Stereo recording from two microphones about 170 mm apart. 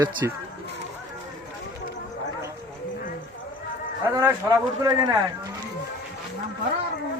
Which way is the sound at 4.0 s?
20° right (ahead or behind).